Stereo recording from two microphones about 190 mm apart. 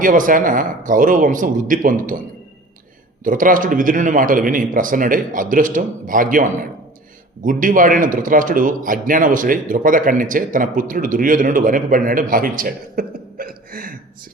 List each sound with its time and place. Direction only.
0.0 s a man's voice: 45° right (ahead or behind)
3.2 s a man's voice: 45° right (ahead or behind)